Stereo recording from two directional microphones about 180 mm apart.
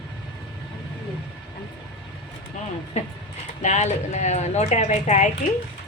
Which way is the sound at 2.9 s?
40° left (ahead or behind).